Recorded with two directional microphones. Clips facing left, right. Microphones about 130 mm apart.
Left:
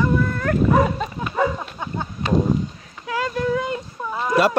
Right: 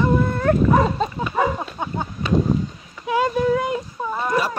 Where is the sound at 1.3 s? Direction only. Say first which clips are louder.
Even; 20° right (ahead or behind).